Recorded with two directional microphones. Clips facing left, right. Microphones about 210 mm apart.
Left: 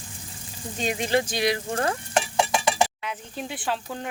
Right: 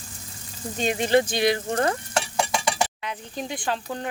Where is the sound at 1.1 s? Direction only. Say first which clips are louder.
Right 4 dB; centre (ahead or behind).